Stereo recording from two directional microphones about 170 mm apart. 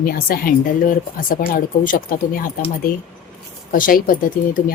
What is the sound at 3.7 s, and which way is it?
Speech, 55° left (ahead or behind).